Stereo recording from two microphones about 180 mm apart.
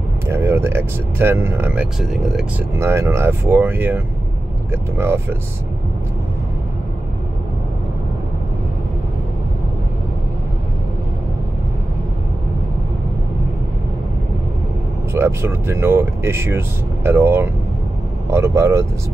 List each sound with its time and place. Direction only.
0.3 s speech: 15° right (ahead or behind)
2.8 s speech: 15° right (ahead or behind)
15.1 s speech: 15° right (ahead or behind)